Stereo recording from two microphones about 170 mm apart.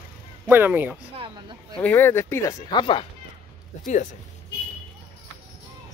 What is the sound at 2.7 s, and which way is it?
Speech, 30° left (ahead or behind).